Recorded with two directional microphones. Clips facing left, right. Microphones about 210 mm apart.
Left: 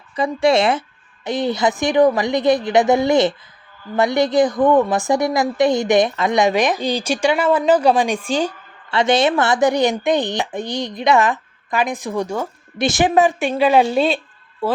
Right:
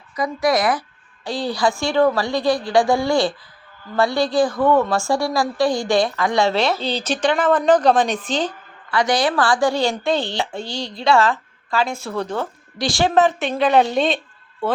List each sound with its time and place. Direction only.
0.2 s a woman's voice: 25° left (ahead or behind); by 8.5 s 10° left (ahead or behind)
8.9 s a woman's voice: 25° left (ahead or behind); by 14.2 s 5° left (ahead or behind)